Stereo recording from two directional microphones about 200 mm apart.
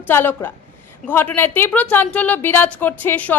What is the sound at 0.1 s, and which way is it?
A woman's voice, 10° left (ahead or behind).